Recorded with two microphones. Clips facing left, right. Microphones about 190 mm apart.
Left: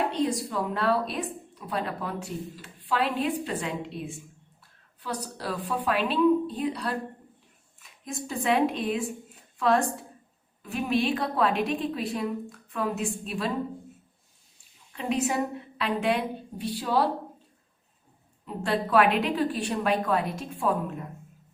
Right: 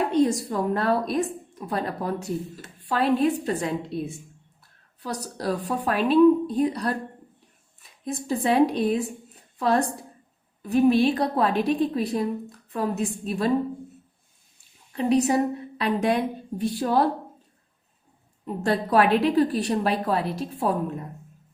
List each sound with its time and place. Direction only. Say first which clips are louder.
0.1 s a woman's voice: right 6 dB; 45° right (ahead or behind)
14.9 s a woman's voice: right 6 dB; 35° right (ahead or behind)
18.4 s a woman's voice: right 3 dB; 45° right (ahead or behind)